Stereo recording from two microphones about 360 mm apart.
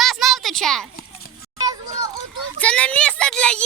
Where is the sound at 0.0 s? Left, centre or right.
Centre.